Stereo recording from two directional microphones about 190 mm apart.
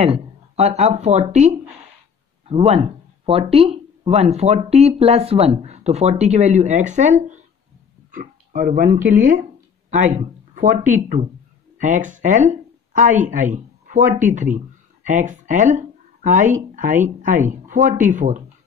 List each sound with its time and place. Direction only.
0.0 s speech: 35° right (ahead or behind)
2.5 s speech: 30° right (ahead or behind)
10.5 s a sound: 45° right (ahead or behind)
10.9 s speech: 40° right (ahead or behind)